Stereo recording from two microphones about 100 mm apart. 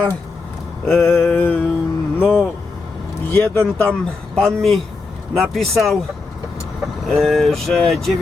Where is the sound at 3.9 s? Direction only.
5° left (ahead or behind).